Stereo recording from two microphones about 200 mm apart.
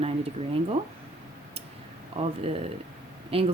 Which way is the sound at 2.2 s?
35° right (ahead or behind).